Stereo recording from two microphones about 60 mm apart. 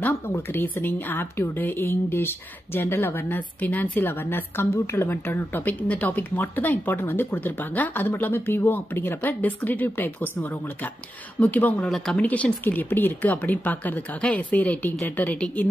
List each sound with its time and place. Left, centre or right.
0.3 s a woman's voice: left
7.3 s a woman's voice: left